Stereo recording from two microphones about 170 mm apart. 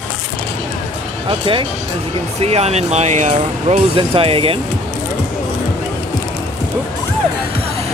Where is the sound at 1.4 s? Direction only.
30° right (ahead or behind).